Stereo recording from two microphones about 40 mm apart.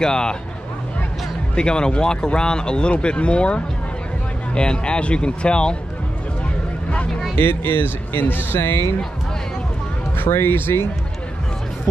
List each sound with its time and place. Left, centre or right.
0.0 s speech: centre
1.5 s speech: left
7.3 s speech: left
10.1 s speech: left